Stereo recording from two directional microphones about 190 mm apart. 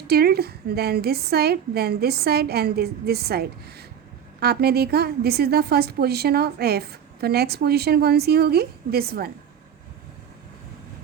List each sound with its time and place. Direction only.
0.1 s a woman's voice: 55° right (ahead or behind)